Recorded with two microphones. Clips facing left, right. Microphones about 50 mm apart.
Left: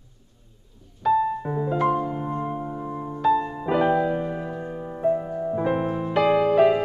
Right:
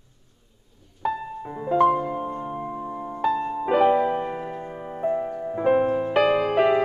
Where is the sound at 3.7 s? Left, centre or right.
Right.